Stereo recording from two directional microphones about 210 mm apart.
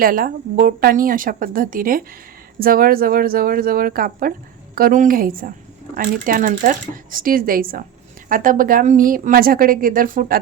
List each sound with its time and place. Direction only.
0.0 s speech: 45° right (ahead or behind)